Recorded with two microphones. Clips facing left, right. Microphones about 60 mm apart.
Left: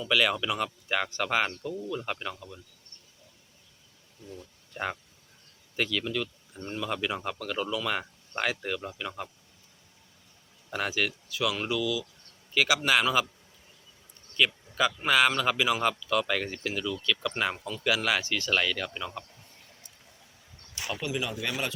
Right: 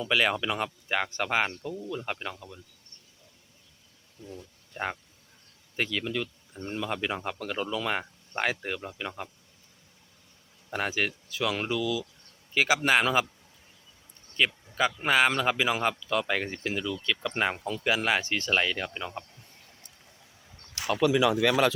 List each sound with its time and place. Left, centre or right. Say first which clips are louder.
0.0 s speech: even; right; by 2.5 s centre
4.3 s speech: even; centre
10.7 s speech: even; right
14.3 s speech: even; right
21.0 s speech: right 11 dB; right